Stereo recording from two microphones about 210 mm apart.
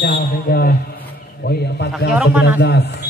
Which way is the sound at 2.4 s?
50° left (ahead or behind).